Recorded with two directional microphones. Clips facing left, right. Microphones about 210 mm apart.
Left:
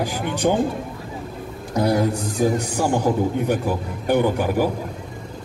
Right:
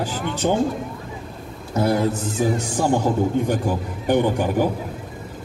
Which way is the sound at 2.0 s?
15° left (ahead or behind).